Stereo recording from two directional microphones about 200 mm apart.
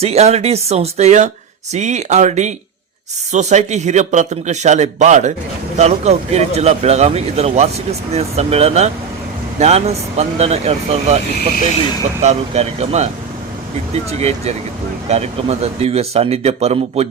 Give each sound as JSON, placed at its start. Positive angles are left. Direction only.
{"t": 0.0, "sound": "speech", "side_deg": -30}
{"t": 12.2, "sound": "speech", "side_deg": -35}